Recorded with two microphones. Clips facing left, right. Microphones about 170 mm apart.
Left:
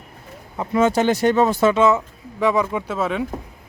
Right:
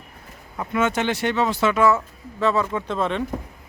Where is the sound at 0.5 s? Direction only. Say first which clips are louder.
Left 5 dB; 30° left (ahead or behind); by 1.7 s 45° left (ahead or behind).